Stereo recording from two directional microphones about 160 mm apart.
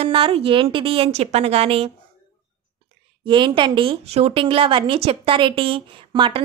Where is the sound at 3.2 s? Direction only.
30° right (ahead or behind).